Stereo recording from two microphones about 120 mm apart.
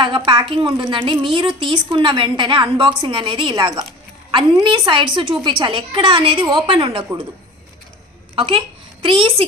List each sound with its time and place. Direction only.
0.0 s a woman's voice: 45° right (ahead or behind)
8.4 s speech: 45° right (ahead or behind)